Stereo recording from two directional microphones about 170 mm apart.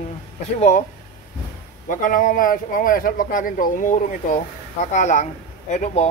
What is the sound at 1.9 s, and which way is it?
Speech, 50° left (ahead or behind).